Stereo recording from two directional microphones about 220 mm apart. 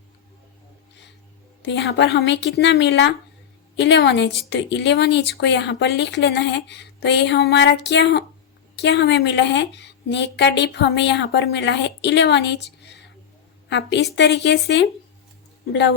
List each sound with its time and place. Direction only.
1.7 s speech: 50° left (ahead or behind)